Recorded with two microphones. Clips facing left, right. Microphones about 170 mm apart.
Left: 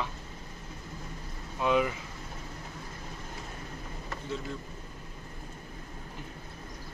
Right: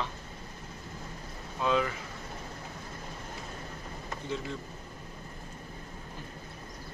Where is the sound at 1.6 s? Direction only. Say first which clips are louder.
Left 2 dB; 15° left (ahead or behind).